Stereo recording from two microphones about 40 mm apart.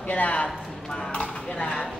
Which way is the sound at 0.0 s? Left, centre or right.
Left.